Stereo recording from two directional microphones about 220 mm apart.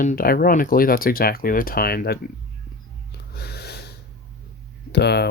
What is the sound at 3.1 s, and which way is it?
Snort, 50° left (ahead or behind).